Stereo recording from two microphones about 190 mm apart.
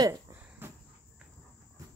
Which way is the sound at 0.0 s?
15° right (ahead or behind).